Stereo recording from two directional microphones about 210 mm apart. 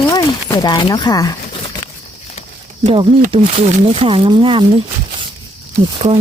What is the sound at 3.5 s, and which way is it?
Speech, 25° right (ahead or behind).